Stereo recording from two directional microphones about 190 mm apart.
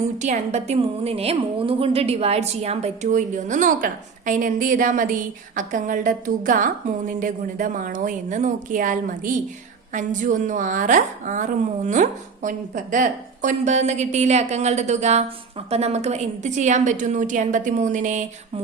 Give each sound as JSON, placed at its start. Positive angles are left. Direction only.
{"t": 0.0, "sound": "a woman's voice", "side_deg": -35}